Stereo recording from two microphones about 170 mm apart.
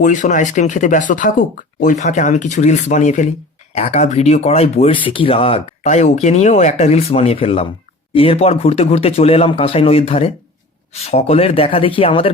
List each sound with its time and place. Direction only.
0.0 s speech: 45° left (ahead or behind)